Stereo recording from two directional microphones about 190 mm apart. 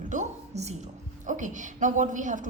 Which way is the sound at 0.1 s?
40° right (ahead or behind).